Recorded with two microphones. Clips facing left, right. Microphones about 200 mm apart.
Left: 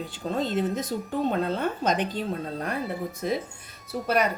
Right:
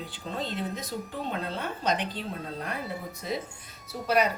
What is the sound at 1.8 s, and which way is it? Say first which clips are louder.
Speech: left 1 dB; 50° left (ahead or behind).